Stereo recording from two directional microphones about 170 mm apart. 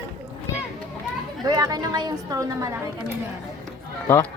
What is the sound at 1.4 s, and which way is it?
A woman's voice, 25° right (ahead or behind).